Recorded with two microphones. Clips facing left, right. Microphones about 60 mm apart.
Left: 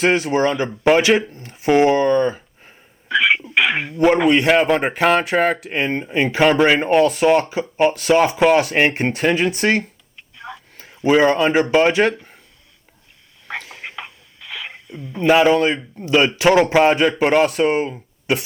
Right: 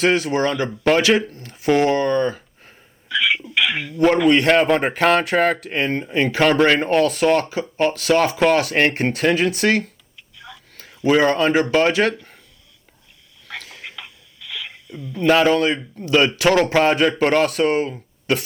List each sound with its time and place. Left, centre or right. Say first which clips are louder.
0.2 s speech: left 2 dB; centre
3.1 s a sound: left 4 dB; left
3.5 s speech: left 3 dB; left
4.3 s speech: even; centre
10.2 s tick: left 6 dB; left
10.8 s a sound: even; left
11.1 s speech: left 2 dB; centre
13.5 s a sound: left 4 dB; left
15.3 s speech: left 2 dB; centre
16.9 s speech: left 1 dB; centre